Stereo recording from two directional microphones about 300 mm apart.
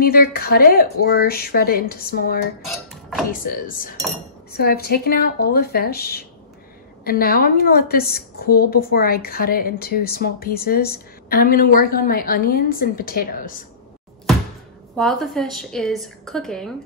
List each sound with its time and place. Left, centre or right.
0.0 s a woman's voice: left
15.0 s a woman's voice: centre